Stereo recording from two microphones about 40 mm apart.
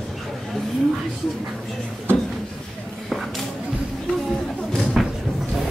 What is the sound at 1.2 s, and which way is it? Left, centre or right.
Music, centre.